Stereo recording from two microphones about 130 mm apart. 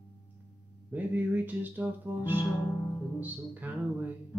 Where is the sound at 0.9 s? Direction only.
15° right (ahead or behind).